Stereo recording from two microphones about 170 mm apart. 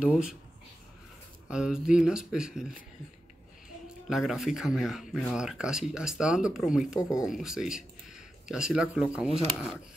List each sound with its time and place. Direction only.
0.0 s speech: 5° right (ahead or behind)
1.5 s speech: 5° right (ahead or behind)
4.1 s speech: centre (ahead or behind)
7.0 s speech: 20° left (ahead or behind)
7.2 s speech: centre (ahead or behind)